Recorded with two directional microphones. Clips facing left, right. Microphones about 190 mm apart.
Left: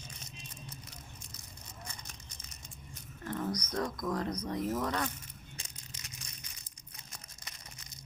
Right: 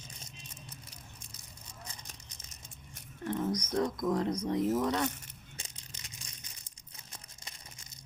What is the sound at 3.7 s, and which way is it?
Speech, 20° right (ahead or behind).